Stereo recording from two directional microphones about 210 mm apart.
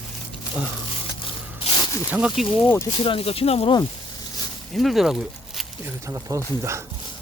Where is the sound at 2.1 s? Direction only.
5° right (ahead or behind).